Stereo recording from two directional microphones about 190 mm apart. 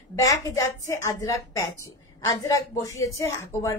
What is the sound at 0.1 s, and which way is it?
A woman's voice, 15° left (ahead or behind).